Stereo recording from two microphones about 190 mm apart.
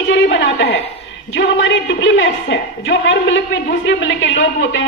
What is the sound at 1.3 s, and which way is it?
A woman's voice, 75° left (ahead or behind).